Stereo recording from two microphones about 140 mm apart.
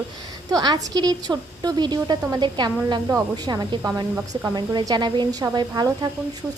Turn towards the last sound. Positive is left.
turn(degrees=-30)  # may be behind; listen again after turning